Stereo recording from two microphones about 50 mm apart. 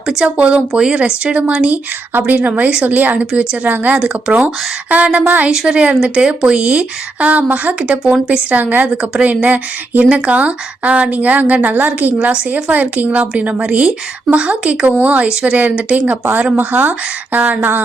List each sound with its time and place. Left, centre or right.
0.0 s speech: centre
0.3 s a woman's voice: right
2.1 s a woman's voice: right
5.5 s a woman's voice: centre
8.4 s a woman's voice: right
16.6 s speech: right